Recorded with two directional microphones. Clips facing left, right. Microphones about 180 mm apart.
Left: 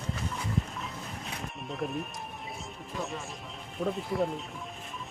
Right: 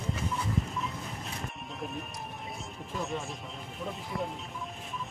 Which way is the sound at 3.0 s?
Centre (ahead or behind).